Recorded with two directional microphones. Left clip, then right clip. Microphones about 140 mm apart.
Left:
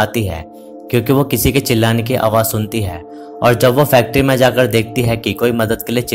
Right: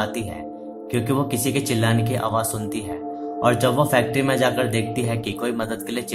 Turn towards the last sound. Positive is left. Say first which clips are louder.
# left 10 dB
turn(degrees=45)  # may be behind; listen again after turning